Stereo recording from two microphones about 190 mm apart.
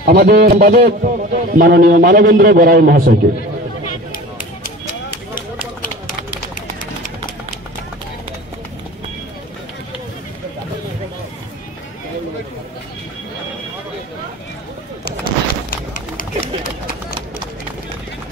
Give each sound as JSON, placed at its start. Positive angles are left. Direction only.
{"t": 0.0, "sound": "a man's voice", "side_deg": -50}
{"t": 15.0, "sound": "vehicle", "side_deg": 50}